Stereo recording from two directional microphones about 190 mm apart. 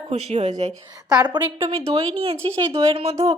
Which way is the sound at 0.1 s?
35° right (ahead or behind).